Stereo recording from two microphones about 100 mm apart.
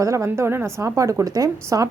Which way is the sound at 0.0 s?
30° right (ahead or behind).